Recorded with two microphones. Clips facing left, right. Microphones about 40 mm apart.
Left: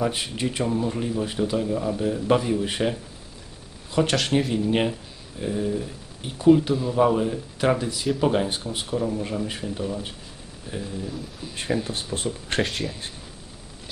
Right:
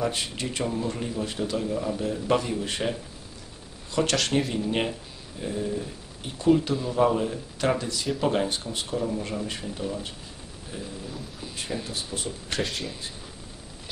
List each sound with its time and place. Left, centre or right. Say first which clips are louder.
0.0 s speech: left 3 dB; centre
3.9 s speech: left 2 dB; centre
11.9 s speech: left 4 dB; left
12.6 s speech: left 3 dB; centre